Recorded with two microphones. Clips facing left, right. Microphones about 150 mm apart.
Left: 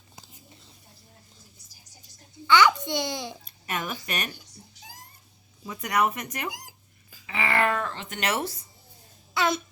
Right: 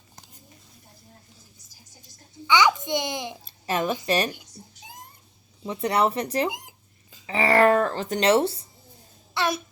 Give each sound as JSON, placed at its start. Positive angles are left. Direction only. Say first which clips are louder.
{"t": 2.5, "sound": "a child's voice", "louder": "even", "side_deg": -15}
{"t": 3.4, "sound": "a sound", "louder": "right 7 dB", "side_deg": -30}
{"t": 4.0, "sound": "speech", "louder": "right 9 dB", "side_deg": -30}
{"t": 4.6, "sound": "a sound", "louder": "right 4 dB", "side_deg": -30}
{"t": 5.6, "sound": "speech", "louder": "right 3 dB", "side_deg": -30}
{"t": 7.3, "sound": "speech", "louder": "right 7 dB", "side_deg": -40}